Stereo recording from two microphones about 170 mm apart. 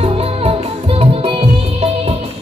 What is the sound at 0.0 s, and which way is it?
Music, 35° right (ahead or behind).